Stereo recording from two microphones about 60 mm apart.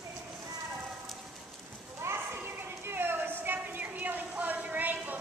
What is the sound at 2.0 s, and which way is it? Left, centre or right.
Children playing, right.